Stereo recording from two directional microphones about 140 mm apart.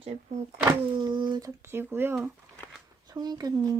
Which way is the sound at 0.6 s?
30° right (ahead or behind).